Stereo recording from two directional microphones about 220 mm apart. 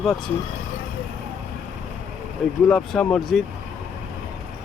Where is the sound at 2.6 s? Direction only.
Centre (ahead or behind).